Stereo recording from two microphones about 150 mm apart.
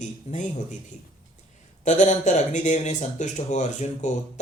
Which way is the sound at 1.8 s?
55° left (ahead or behind).